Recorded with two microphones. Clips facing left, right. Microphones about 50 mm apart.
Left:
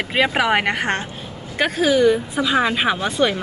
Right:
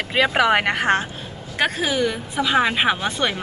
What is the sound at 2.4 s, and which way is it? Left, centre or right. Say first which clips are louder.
Speech: right 1 dB; right.